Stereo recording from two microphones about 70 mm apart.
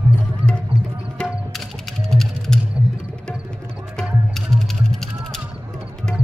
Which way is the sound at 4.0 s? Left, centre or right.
Centre.